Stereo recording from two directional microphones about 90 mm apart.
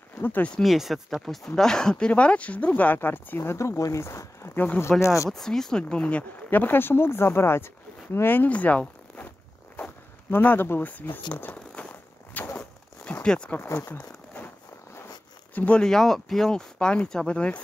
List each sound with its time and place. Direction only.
0.2 s speech: 20° left (ahead or behind)
0.5 s speech: centre (ahead or behind); by 4.9 s 20° left (ahead or behind)
5.0 s speech: 35° left (ahead or behind)
5.3 s speech: 5° left (ahead or behind)
10.3 s speech: 25° left (ahead or behind)
11.3 s a sound: 15° left (ahead or behind)
15.5 s speech: 15° left (ahead or behind)